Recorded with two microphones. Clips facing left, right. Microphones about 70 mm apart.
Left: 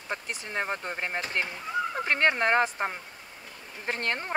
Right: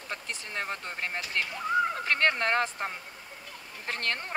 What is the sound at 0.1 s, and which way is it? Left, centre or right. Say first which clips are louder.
Speech: left 4 dB; left.